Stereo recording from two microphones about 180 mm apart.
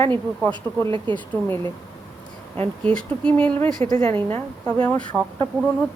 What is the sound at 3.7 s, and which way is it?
Speech, 50° right (ahead or behind).